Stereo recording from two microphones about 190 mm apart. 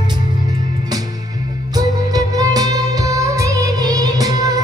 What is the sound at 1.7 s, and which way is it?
Music of bollywood, 20° right (ahead or behind).